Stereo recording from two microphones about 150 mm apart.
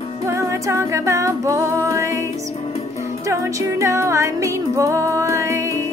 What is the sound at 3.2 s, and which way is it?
Music, 20° right (ahead or behind).